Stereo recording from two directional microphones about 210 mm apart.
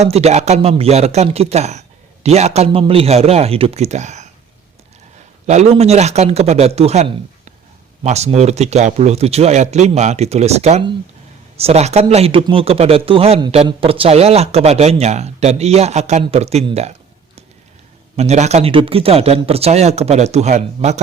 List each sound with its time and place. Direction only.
0.0 s speech: 30° right (ahead or behind)
5.5 s speech: 30° right (ahead or behind)
18.2 s speech: 30° right (ahead or behind)